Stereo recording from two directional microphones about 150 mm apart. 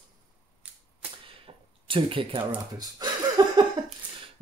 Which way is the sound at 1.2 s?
35° right (ahead or behind).